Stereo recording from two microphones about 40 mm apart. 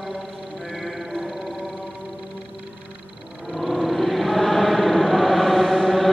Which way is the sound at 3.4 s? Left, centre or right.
Centre.